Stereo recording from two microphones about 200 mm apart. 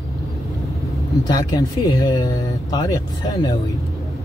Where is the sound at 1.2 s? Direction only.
20° left (ahead or behind).